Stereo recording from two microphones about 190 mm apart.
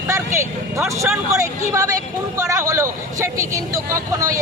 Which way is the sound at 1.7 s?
15° right (ahead or behind).